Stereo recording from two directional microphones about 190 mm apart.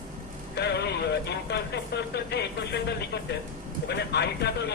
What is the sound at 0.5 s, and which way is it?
Speech, 60° left (ahead or behind).